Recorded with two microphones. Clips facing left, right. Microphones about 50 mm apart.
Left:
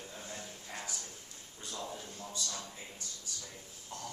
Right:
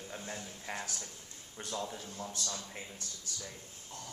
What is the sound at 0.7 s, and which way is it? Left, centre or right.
Speech, right.